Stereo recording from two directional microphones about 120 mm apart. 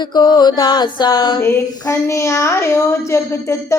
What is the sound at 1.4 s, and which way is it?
Speech, 25° left (ahead or behind).